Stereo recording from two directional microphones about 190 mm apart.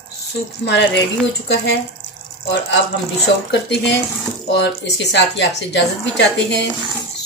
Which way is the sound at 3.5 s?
65° left (ahead or behind).